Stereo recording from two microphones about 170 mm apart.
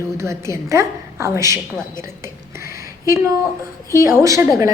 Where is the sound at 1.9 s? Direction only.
15° right (ahead or behind).